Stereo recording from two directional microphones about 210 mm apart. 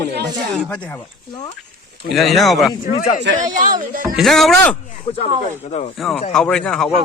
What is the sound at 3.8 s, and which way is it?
Speech, 40° right (ahead or behind).